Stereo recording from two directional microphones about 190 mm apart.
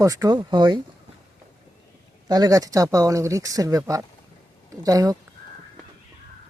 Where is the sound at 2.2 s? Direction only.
20° right (ahead or behind).